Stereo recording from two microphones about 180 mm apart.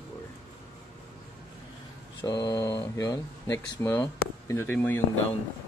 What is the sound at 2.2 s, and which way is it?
Speech, 20° left (ahead or behind).